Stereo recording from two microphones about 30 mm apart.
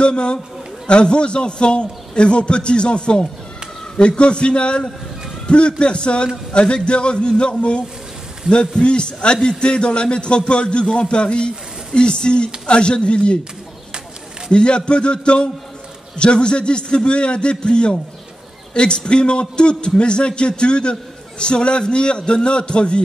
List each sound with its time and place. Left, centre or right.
0.0 s a man's voice: left
14.5 s a man's voice: left